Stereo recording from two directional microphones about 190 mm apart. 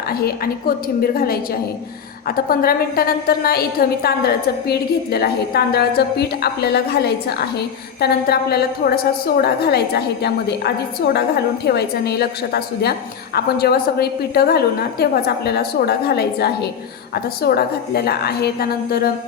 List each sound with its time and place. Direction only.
0.1 s a woman's voice: 55° left (ahead or behind)